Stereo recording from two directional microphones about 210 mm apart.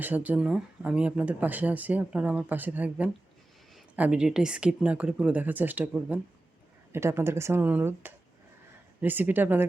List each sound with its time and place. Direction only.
0.0 s speech: 10° right (ahead or behind)